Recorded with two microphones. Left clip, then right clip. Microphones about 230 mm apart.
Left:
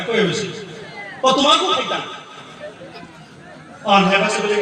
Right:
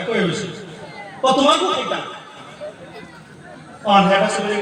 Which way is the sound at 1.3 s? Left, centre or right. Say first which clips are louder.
Even; left.